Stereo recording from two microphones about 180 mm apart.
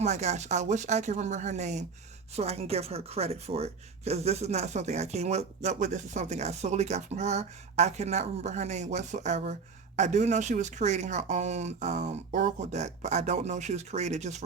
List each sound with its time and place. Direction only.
0.0 s speech: 40° right (ahead or behind)